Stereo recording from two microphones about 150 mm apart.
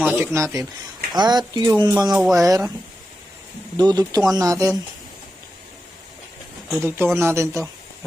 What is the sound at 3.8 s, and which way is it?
Speech, 25° right (ahead or behind).